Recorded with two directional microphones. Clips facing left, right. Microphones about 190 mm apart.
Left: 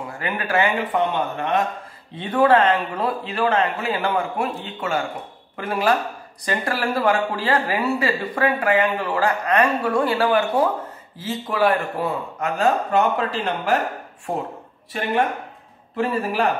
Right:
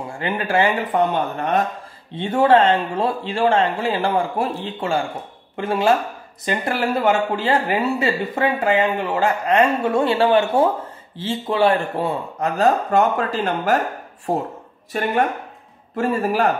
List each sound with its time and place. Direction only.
0.1 s speech: 25° right (ahead or behind)
0.9 s a man's voice: 40° right (ahead or behind)
2.1 s a man's voice: 25° right (ahead or behind); by 13.7 s 45° right (ahead or behind)
16.0 s a man's voice: 40° right (ahead or behind)